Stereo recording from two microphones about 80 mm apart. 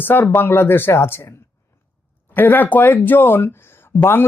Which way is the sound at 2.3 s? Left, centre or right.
Left.